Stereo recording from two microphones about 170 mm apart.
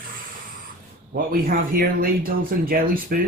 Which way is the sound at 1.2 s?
60° right (ahead or behind).